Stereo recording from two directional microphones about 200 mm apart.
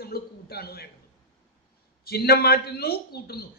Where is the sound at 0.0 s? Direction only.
50° left (ahead or behind).